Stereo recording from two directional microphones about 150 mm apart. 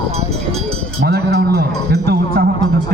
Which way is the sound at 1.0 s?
90° right.